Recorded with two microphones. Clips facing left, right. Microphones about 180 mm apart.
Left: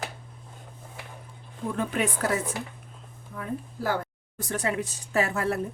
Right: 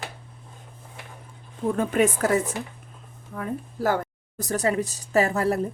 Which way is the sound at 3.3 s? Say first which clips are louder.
Right 3 dB; 45° right (ahead or behind).